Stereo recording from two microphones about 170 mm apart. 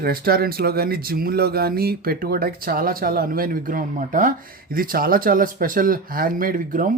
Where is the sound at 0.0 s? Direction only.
65° right (ahead or behind).